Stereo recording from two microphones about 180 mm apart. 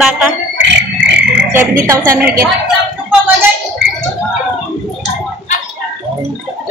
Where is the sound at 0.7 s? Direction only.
70° right (ahead or behind).